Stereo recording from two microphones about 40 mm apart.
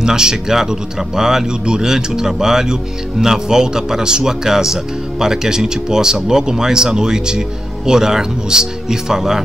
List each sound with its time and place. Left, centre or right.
0.0 s speech: centre